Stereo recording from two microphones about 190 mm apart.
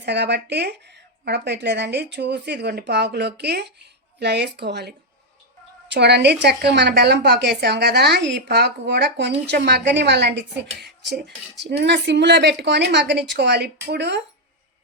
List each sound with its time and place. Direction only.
0.0 s a woman's voice: 60° right (ahead or behind)